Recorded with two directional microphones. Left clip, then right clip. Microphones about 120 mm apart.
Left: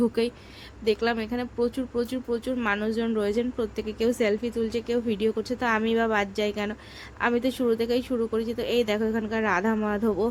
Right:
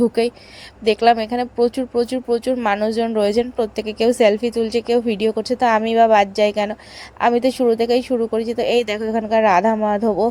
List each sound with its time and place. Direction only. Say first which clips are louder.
0.0 s a woman's voice: right 8 dB; 40° right (ahead or behind)